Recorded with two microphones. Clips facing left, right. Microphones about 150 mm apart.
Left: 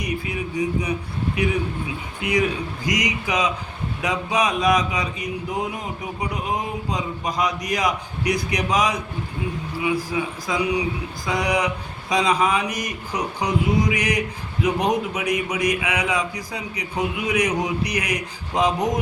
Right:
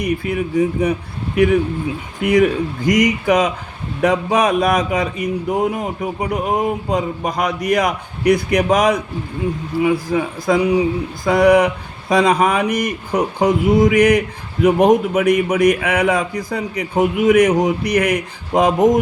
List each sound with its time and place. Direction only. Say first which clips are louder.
0.0 s speech: right 7 dB; 55° right (ahead or behind)
2.2 s speech: right 8 dB; 50° right (ahead or behind)